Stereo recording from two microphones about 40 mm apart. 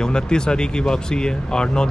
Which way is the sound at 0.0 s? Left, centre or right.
Centre.